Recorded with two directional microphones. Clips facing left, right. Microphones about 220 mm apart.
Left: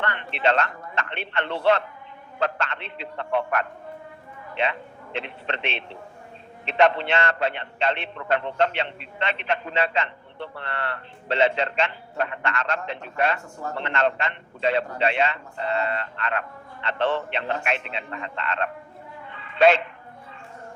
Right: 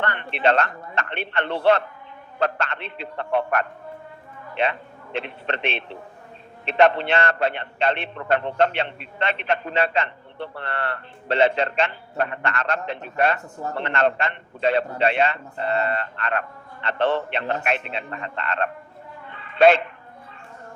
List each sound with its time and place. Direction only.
0.0 s a man's voice: 50° right (ahead or behind)
5.2 s a man's voice: 50° right (ahead or behind)
19.4 s a sound: 50° right (ahead or behind)